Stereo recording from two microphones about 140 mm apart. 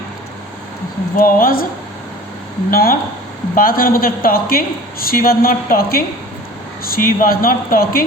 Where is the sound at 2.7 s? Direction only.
90° left.